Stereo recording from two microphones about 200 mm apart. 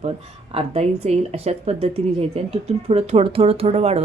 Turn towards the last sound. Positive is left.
turn(degrees=-30)  # may be behind; listen again after turning